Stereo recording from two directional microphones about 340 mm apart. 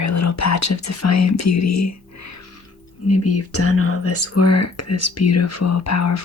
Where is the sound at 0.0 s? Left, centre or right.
Left.